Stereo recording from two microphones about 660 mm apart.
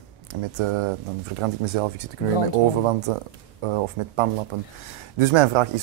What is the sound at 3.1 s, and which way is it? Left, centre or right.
Speech, right.